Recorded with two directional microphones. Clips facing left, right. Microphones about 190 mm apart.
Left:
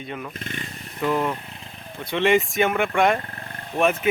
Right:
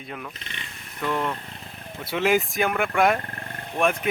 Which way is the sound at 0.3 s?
50° left (ahead or behind).